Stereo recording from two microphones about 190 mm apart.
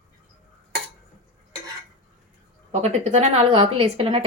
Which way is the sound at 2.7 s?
35° right (ahead or behind).